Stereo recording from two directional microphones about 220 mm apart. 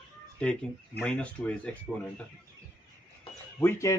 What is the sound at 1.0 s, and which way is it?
Speech, 5° left (ahead or behind).